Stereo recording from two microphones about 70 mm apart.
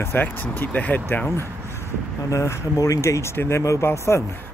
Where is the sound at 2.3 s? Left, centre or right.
Left.